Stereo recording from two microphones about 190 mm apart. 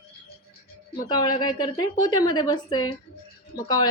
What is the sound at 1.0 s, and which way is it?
A woman's voice, 20° left (ahead or behind).